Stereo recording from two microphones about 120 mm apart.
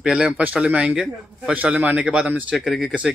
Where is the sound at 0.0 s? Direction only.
5° right (ahead or behind).